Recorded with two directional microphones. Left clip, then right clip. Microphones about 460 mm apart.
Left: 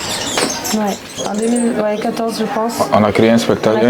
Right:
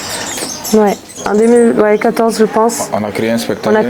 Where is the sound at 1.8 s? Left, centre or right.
Right.